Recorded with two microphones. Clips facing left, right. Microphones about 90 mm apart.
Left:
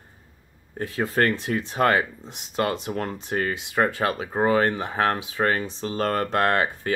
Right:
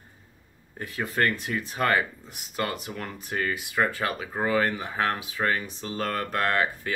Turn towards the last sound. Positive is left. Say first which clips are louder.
# left 3 dB
turn(degrees=35)  # may be behind; listen again after turning